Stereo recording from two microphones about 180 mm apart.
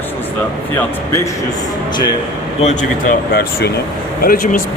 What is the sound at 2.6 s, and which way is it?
Speech, 45° left (ahead or behind).